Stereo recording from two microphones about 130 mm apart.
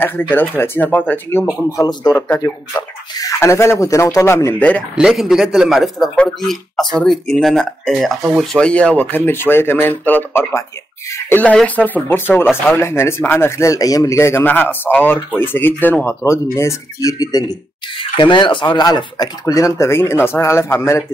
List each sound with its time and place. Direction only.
0.0 s speech: 15° left (ahead or behind)
1.7 s speech: 30° left (ahead or behind)
2.1 s speech: 15° left (ahead or behind)
4.9 s speech: 5° right (ahead or behind); by 21.0 s 20° left (ahead or behind)